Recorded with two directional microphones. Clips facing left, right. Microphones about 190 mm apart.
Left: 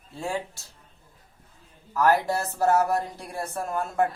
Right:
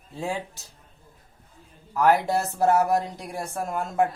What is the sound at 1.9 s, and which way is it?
A woman's voice, 15° right (ahead or behind).